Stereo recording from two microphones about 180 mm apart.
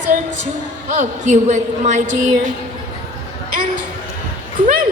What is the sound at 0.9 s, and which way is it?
A woman's voice, 45° right (ahead or behind).